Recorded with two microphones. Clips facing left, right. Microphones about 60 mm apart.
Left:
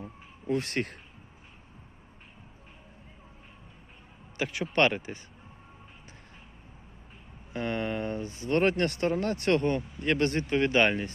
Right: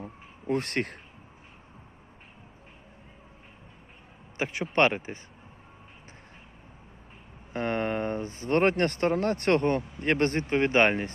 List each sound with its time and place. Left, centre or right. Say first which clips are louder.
0.0 s a sound: right 2 dB; right
4.4 s speech: right 1 dB; right
7.5 s speech: right 3 dB; right